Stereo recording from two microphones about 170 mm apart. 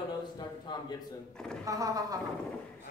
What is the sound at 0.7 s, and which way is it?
Speech, 25° left (ahead or behind).